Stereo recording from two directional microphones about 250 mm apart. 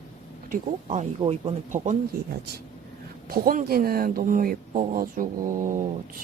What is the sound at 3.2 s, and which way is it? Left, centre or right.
Speech, right.